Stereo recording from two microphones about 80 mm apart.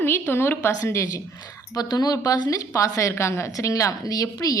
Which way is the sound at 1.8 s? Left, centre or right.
Left.